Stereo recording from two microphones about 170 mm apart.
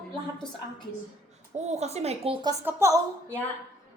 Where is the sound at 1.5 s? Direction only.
40° right (ahead or behind).